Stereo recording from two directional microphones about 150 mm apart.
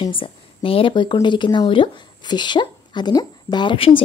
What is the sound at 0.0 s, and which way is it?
Speech, 35° left (ahead or behind).